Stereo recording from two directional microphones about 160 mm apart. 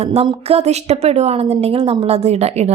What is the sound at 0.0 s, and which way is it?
A woman's voice, 40° right (ahead or behind).